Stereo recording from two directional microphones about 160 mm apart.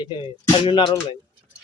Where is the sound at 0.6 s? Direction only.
30° left (ahead or behind).